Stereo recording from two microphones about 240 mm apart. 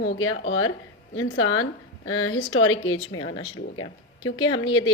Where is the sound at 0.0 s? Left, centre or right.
Left.